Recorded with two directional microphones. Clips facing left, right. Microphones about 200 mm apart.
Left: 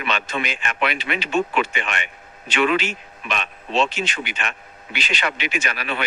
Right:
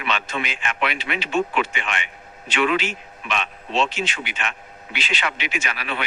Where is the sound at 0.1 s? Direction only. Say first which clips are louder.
Left 1 dB; 45° left (ahead or behind).